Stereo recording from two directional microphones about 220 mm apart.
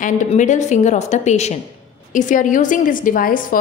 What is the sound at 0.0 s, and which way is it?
A woman's voice, 35° left (ahead or behind).